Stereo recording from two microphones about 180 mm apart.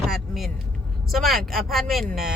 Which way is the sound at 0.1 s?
Centre (ahead or behind).